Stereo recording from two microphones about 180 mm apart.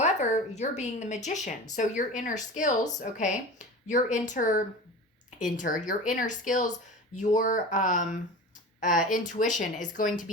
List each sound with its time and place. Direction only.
0.0 s speech: 40° left (ahead or behind)